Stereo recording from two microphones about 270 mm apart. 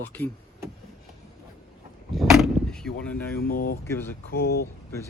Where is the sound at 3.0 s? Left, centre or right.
Centre.